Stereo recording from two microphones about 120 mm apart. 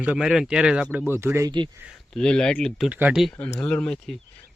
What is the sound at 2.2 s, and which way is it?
Speech, 5° left (ahead or behind).